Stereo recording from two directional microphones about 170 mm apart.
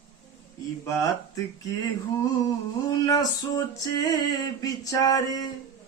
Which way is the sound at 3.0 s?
20° left (ahead or behind).